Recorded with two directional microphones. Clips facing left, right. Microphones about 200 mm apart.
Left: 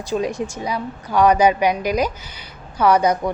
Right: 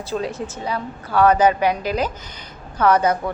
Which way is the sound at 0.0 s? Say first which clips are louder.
Left 3 dB; 15° left (ahead or behind).